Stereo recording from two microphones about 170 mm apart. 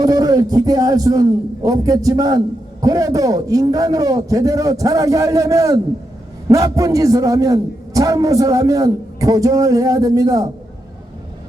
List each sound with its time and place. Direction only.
0.0 s a man's voice: 20° right (ahead or behind)